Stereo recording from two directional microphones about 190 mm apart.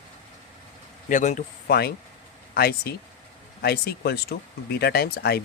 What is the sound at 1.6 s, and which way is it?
Speech, 55° left (ahead or behind).